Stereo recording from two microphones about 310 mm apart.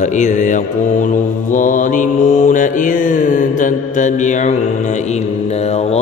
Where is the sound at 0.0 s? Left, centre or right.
Left.